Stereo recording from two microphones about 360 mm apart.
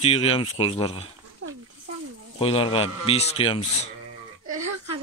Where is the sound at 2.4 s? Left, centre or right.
Centre.